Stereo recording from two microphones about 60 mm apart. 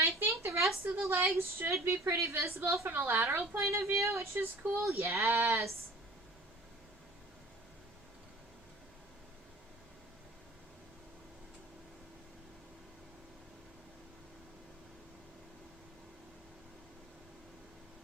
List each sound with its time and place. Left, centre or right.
0.2 s a sound: right
1.1 s a woman's voice: right
4.4 s a woman's voice: right
4.9 s a woman's voice: right